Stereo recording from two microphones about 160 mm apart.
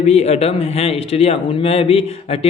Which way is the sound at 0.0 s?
40° left (ahead or behind).